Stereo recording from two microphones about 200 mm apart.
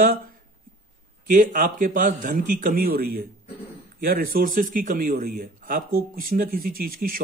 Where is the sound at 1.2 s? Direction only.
40° right (ahead or behind).